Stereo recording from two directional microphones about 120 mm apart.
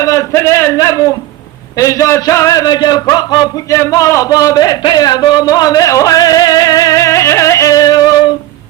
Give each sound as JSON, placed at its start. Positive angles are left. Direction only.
{"t": 0.0, "sound": "a man's voice", "side_deg": 25}
{"t": 3.8, "sound": "a man's voice", "side_deg": 25}
{"t": 4.8, "sound": "music", "side_deg": 35}